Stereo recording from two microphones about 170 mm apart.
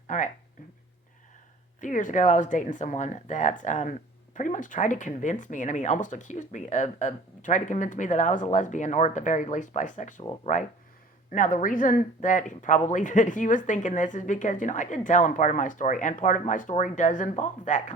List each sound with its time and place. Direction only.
0.1 s speech: 45° left (ahead or behind)
1.8 s speech: 50° left (ahead or behind)